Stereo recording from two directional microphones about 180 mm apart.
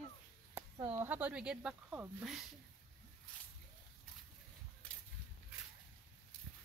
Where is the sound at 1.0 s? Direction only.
10° right (ahead or behind).